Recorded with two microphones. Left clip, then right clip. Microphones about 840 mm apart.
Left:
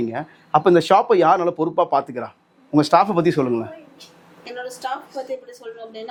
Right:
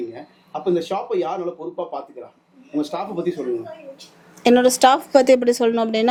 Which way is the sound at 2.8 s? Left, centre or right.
Left.